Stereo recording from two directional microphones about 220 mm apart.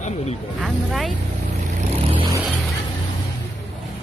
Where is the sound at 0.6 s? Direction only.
Centre (ahead or behind).